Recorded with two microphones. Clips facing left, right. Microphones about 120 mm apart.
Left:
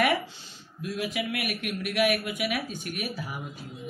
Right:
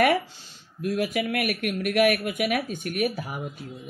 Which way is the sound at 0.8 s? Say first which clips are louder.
Right 5 dB; 55° right (ahead or behind).